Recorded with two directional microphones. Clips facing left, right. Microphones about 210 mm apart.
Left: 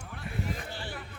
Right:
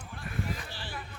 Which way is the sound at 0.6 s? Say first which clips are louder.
Left 2 dB; 55° left (ahead or behind).